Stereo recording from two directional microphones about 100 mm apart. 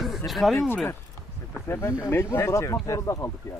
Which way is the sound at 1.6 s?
25° left (ahead or behind).